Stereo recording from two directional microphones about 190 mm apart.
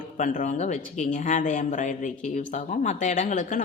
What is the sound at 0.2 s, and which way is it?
A woman's voice, 40° left (ahead or behind).